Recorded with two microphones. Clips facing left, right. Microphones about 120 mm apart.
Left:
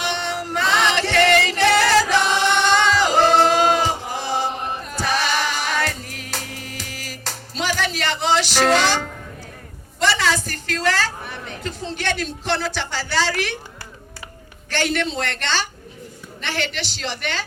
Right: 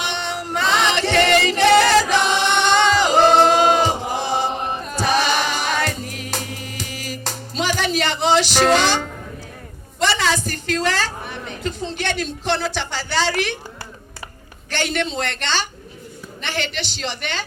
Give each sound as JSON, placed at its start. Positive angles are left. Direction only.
{"t": 0.0, "sound": "music", "side_deg": -20}
{"t": 10.0, "sound": "a sound", "side_deg": -20}
{"t": 14.7, "sound": "a man's voice", "side_deg": -20}